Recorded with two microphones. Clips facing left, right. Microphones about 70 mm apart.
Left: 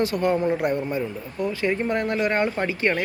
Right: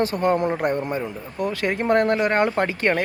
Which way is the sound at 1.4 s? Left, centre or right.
Right.